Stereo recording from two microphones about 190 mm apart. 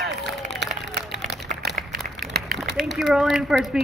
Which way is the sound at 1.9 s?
50° right (ahead or behind).